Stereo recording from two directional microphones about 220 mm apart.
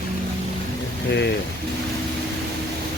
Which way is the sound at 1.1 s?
50° left (ahead or behind).